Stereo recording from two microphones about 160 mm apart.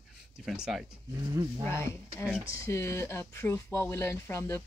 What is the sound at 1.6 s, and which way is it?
Speech, 15° left (ahead or behind).